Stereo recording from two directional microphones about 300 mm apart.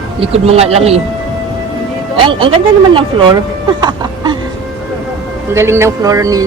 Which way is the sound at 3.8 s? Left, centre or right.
Centre.